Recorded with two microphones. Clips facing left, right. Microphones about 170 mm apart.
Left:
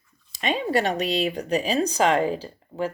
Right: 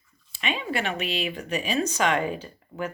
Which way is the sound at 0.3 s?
40° left (ahead or behind).